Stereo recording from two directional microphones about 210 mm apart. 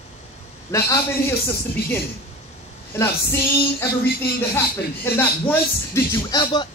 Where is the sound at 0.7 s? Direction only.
15° left (ahead or behind).